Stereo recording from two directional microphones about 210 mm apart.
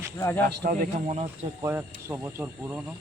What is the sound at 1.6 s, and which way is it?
Speech, 10° right (ahead or behind).